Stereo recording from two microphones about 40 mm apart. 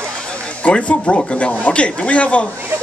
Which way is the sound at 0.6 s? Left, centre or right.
Left.